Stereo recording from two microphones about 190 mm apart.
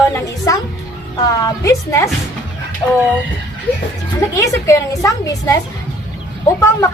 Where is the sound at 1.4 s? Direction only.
15° left (ahead or behind).